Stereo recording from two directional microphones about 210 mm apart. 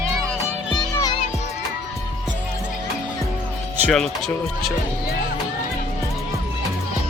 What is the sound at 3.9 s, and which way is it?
Speech, centre (ahead or behind).